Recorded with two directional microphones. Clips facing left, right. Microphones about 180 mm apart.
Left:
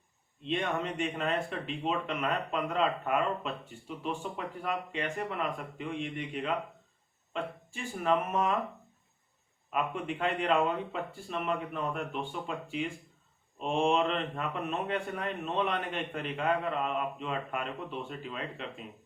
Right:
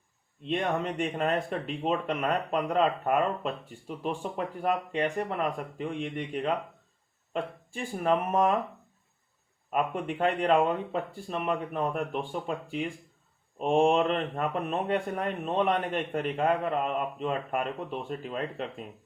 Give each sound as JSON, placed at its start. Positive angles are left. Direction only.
{"t": 0.4, "sound": "speech", "side_deg": -40}
{"t": 7.7, "sound": "speech", "side_deg": -40}
{"t": 9.6, "sound": "speech", "side_deg": -45}